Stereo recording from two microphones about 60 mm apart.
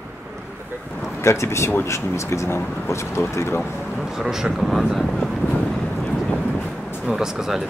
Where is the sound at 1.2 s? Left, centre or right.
Left.